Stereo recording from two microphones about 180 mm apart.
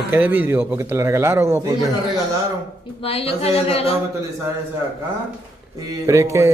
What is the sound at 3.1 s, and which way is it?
Speech, 35° left (ahead or behind).